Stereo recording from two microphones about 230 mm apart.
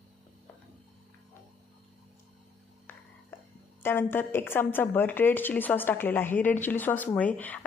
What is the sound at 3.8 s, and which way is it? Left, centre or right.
A woman's voice, centre.